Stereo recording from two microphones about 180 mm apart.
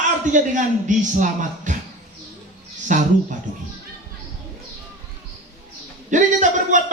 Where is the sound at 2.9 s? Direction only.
45° right (ahead or behind).